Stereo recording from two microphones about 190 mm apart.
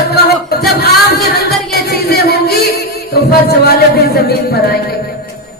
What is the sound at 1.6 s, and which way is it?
Music, 55° left (ahead or behind).